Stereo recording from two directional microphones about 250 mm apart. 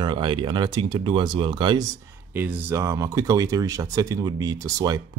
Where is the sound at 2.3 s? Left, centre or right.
Centre.